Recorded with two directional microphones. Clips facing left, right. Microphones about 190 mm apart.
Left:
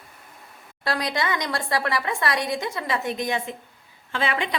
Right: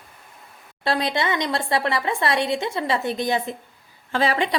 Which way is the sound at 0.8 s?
25° right (ahead or behind).